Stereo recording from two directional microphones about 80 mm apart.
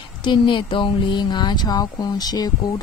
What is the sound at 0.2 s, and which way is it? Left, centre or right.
A woman's voice, left.